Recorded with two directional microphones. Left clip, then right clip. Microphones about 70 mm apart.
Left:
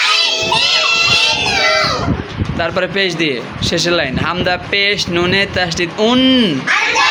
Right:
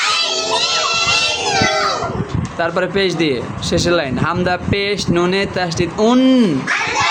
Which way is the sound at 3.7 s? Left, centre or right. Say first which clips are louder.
Left 1 dB; right.